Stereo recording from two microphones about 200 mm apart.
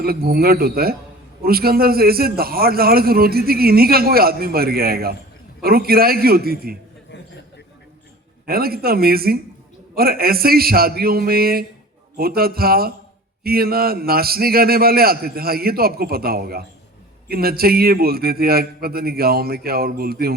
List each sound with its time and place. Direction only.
0.0 s a man's voice: 50° right (ahead or behind)
8.4 s a man's voice: 50° right (ahead or behind)